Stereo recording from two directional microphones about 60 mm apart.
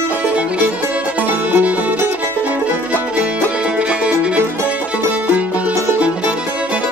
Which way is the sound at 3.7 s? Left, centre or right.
Right.